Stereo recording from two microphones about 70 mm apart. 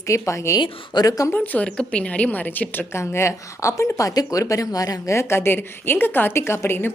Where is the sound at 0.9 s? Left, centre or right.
Left.